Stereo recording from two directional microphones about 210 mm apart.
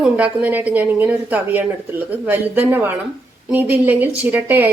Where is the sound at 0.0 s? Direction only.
5° right (ahead or behind).